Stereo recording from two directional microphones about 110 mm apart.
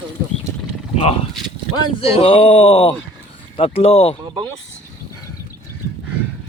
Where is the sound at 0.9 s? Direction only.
60° left (ahead or behind).